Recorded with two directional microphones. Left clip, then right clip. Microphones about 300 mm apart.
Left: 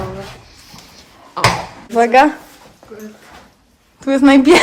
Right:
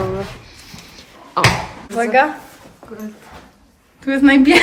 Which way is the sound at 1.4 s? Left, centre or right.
Centre.